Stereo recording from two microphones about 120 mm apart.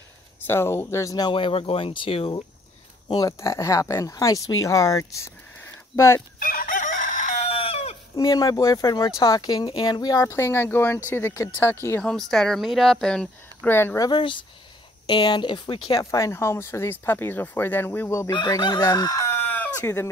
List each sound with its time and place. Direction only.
0.4 s speech: 20° left (ahead or behind)
1.3 s speech: 50° left (ahead or behind)
3.1 s speech: 30° left (ahead or behind)
6.8 s crowing: 90° left
7.4 s chicken: 55° left (ahead or behind)
8.2 s speech: 30° left (ahead or behind)
12.0 s speech: 5° left (ahead or behind)
13.7 s speech: 20° left (ahead or behind)
14.0 s speech: 40° left (ahead or behind); by 18.3 s 20° left (ahead or behind)
18.3 s chicken: 40° left (ahead or behind); by 19.7 s 15° left (ahead or behind)